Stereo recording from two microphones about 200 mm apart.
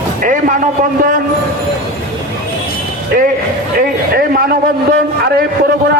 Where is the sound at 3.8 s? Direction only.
45° right (ahead or behind).